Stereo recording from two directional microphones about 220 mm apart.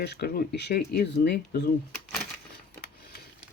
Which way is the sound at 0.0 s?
50° left (ahead or behind).